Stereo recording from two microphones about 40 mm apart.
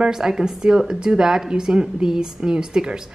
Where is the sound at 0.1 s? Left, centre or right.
Centre.